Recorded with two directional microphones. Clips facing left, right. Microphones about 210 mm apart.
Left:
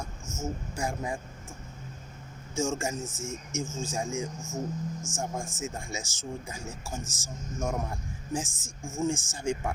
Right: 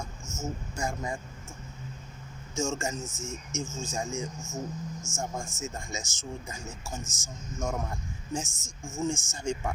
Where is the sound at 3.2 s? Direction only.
50° left (ahead or behind).